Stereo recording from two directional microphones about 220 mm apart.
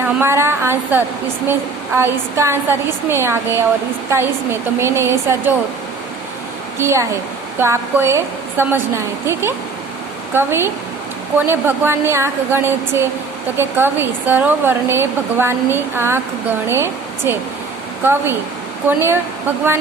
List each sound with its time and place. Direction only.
0.0 s a woman's voice: 10° right (ahead or behind)
4.8 s a woman's voice: 10° right (ahead or behind)
6.7 s a woman's voice: 10° right (ahead or behind)